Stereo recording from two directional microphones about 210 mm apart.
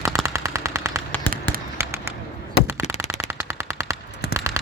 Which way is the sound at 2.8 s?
30° left (ahead or behind).